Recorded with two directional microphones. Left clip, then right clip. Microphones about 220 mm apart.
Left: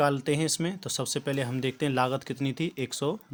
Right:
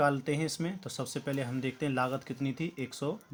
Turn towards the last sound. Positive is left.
turn(degrees=40)  # may be behind; listen again after turning